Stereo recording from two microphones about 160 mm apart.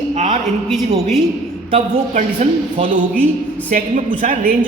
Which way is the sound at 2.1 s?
50° right (ahead or behind).